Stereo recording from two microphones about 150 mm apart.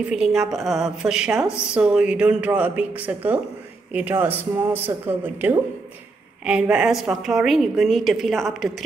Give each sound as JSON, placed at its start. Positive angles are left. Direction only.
{"t": 0.1, "sound": "a woman's voice", "side_deg": -5}